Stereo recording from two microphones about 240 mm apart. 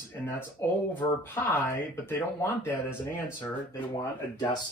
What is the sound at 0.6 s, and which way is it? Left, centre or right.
Speech, centre.